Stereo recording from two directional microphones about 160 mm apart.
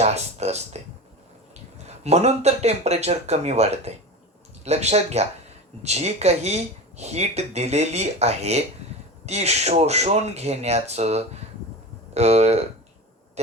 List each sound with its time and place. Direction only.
0.0 s speech: 45° right (ahead or behind)
2.0 s speech: 45° right (ahead or behind)